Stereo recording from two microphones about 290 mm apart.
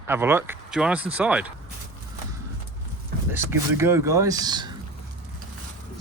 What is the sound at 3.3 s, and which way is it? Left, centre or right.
Speech, centre.